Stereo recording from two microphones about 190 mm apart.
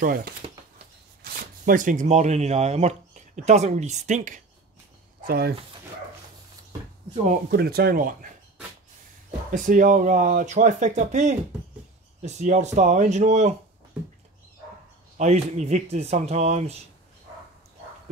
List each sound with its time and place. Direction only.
0.0 s speech: 50° right (ahead or behind)
5.2 s speech: 50° right (ahead or behind)
7.5 s speech: 55° right (ahead or behind)
9.5 s speech: 40° right (ahead or behind)
15.1 s speech: 35° right (ahead or behind)